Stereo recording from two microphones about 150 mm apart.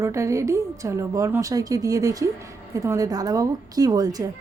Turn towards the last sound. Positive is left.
turn(degrees=-25)  # may be behind; listen again after turning